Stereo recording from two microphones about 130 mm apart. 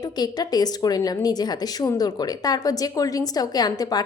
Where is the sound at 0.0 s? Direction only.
30° left (ahead or behind).